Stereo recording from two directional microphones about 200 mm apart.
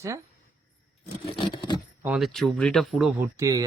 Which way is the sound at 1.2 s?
25° left (ahead or behind).